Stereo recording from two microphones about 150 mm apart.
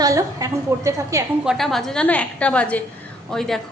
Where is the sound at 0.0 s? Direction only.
20° right (ahead or behind).